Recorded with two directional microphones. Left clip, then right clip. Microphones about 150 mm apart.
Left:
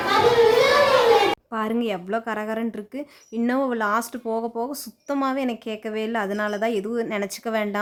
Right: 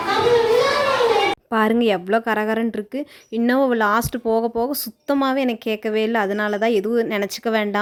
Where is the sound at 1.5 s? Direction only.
35° right (ahead or behind).